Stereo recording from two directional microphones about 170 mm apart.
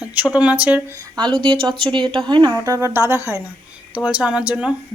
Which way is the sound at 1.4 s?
30° right (ahead or behind).